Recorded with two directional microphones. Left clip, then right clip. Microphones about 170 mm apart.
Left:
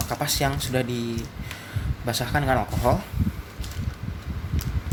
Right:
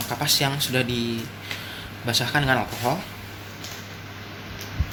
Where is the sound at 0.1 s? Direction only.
30° left (ahead or behind).